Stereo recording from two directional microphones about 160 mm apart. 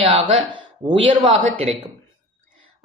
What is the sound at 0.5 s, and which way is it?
Speech, 30° right (ahead or behind).